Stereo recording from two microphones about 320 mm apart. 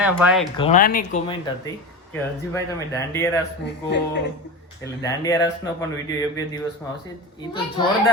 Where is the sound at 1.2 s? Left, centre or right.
Centre.